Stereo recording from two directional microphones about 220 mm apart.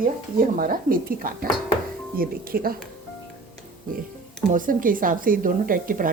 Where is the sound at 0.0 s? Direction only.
40° right (ahead or behind).